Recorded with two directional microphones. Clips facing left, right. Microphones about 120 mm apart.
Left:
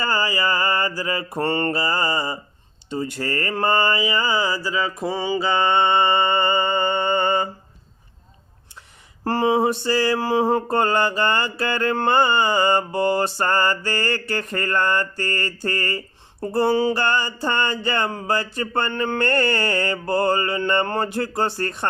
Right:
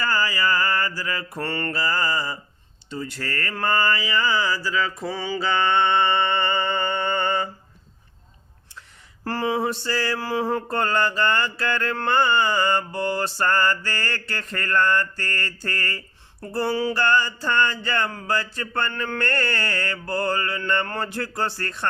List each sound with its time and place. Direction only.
0.0 s mantra: 20° left (ahead or behind)
9.2 s mantra: 20° left (ahead or behind)